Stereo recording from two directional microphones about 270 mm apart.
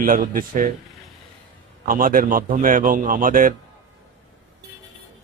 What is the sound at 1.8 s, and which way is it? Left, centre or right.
A man's voice, right.